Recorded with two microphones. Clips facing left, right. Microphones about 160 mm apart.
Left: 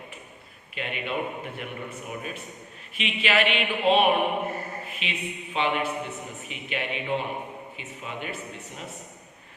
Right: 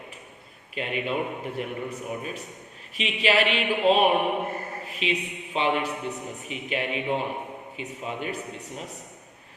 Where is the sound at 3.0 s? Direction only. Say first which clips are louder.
Right 2 dB; 35° right (ahead or behind).